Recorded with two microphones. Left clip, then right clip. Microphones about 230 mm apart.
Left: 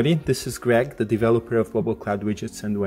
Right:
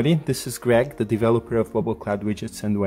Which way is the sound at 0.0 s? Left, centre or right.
Centre.